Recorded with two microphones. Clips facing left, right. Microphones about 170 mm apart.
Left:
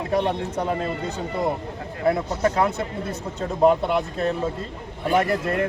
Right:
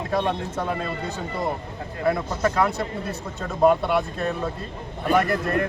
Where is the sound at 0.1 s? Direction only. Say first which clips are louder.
Left 2 dB; 15° left (ahead or behind).